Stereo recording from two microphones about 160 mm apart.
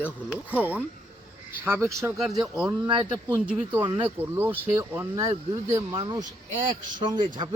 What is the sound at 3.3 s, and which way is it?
Speech, 10° right (ahead or behind).